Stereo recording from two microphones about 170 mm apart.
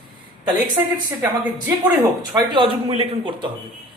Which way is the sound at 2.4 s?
30° right (ahead or behind).